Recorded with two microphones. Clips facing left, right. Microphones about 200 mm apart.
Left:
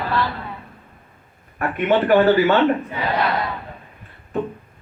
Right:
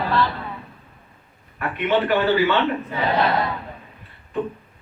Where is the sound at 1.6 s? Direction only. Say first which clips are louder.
Left 3 dB; 50° left (ahead or behind).